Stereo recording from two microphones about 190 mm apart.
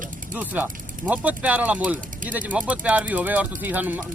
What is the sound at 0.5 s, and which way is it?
Speech, 10° right (ahead or behind).